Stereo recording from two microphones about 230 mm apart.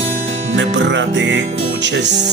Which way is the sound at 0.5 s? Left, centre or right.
Right.